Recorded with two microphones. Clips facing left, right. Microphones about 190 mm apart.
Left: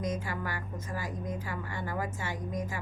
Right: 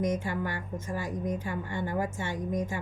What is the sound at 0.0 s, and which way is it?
A woman's voice, 25° right (ahead or behind).